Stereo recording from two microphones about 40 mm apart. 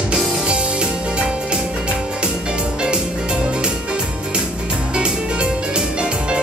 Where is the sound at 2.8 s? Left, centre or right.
Right.